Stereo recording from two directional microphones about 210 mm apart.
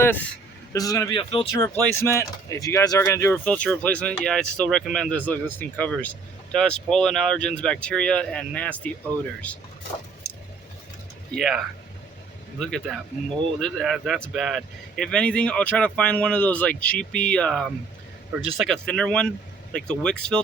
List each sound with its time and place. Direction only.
0.7 s speech: 15° left (ahead or behind)
1.7 s speech: 10° left (ahead or behind)
11.3 s speech: centre (ahead or behind)